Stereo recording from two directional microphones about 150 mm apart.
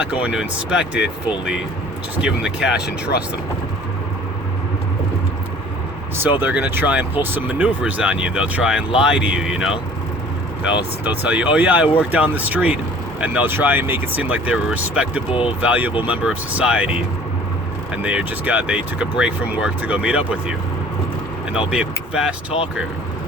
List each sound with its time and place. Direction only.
0.0 s speech: 10° right (ahead or behind)
6.4 s speech: 10° right (ahead or behind)
11.0 s speech: 10° right (ahead or behind)
15.3 s speech: 35° left (ahead or behind)
15.6 s speech: 10° right (ahead or behind)
21.7 s speech: 5° right (ahead or behind)